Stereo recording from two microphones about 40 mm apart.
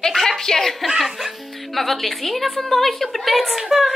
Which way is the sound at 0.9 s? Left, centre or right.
Centre.